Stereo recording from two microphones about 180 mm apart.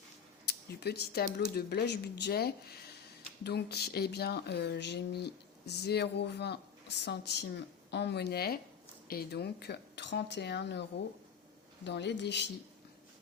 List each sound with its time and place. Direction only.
0.4 s speech: 65° left (ahead or behind)
11.9 s speech: 75° left (ahead or behind)